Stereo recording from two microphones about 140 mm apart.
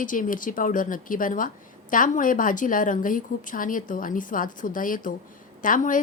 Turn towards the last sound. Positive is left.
turn(degrees=70)  # may be behind; listen again after turning